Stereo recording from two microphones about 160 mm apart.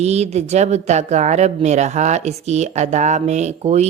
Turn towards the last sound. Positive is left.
turn(degrees=-45)  # may be behind; listen again after turning